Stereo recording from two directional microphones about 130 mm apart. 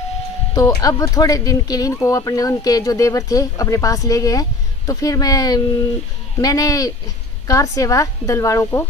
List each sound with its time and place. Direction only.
0.6 s speech: 30° left (ahead or behind)